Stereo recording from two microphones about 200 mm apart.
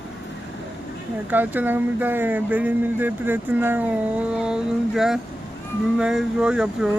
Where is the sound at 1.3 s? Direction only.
10° right (ahead or behind).